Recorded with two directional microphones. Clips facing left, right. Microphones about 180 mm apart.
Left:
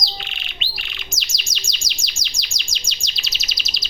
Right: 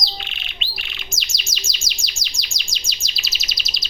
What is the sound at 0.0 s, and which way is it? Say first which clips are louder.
Chirp: even; centre (ahead or behind).